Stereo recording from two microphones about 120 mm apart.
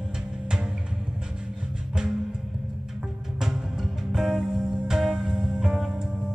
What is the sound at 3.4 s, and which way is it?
Music, 5° right (ahead or behind).